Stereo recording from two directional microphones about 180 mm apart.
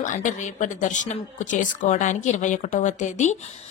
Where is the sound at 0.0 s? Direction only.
45° left (ahead or behind).